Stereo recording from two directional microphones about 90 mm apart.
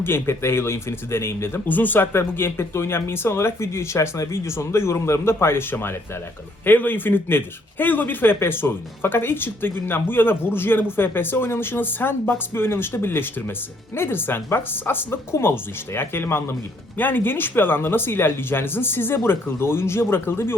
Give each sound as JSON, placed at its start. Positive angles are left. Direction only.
{"t": 0.0, "sound": "speech", "side_deg": 25}